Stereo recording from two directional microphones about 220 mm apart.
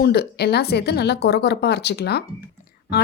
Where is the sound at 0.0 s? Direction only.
45° left (ahead or behind).